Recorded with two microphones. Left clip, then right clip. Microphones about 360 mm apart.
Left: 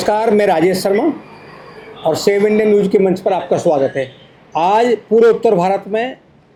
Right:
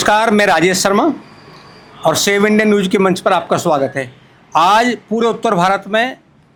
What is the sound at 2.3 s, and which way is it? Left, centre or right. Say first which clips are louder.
Speech: left 3 dB; right.